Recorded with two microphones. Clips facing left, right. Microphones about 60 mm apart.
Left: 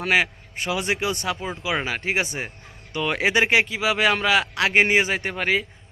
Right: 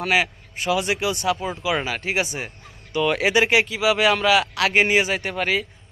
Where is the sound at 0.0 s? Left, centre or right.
Left.